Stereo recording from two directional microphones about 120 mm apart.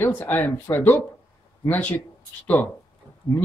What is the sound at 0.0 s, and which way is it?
Speech, 15° left (ahead or behind).